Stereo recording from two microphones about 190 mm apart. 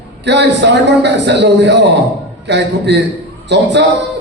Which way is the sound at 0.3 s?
65° right (ahead or behind).